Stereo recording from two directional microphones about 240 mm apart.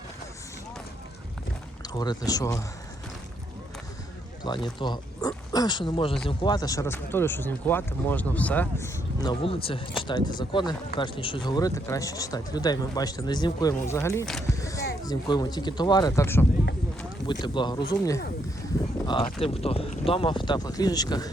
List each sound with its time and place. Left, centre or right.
1.9 s speech: centre
4.4 s speech: centre
9.2 s speech: left
14.4 s a sound: centre
15.0 s speech: centre
19.0 s speech: left